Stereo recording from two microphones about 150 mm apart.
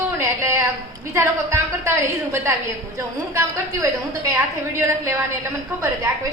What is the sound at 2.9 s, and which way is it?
Speech, 20° right (ahead or behind).